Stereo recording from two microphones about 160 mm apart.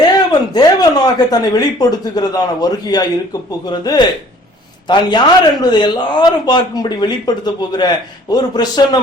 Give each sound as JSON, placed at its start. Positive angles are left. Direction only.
{"t": 0.0, "sound": "speech", "side_deg": 25}